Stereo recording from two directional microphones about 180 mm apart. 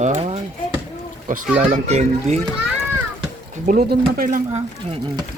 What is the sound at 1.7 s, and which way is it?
Speech, 40° right (ahead or behind).